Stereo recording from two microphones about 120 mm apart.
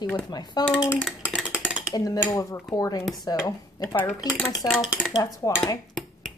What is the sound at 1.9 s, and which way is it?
Cutlery, 30° left (ahead or behind).